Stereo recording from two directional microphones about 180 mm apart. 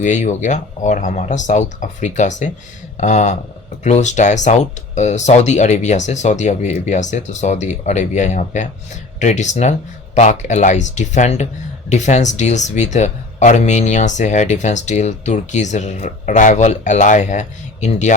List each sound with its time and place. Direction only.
0.0 s speech: 40° left (ahead or behind)